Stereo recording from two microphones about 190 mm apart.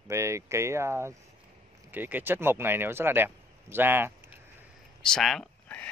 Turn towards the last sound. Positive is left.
turn(degrees=5)  # may be behind; listen again after turning